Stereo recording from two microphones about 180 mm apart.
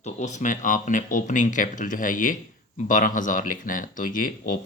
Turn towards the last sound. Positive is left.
turn(degrees=50)  # may be behind; listen again after turning